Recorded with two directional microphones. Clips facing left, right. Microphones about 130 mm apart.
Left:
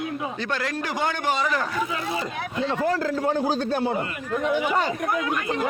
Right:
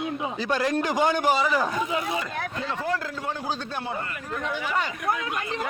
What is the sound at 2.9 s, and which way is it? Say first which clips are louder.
Speech: left 6 dB; 40° left (ahead or behind).